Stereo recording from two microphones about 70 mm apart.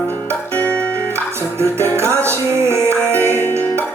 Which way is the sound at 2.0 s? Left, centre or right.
Right.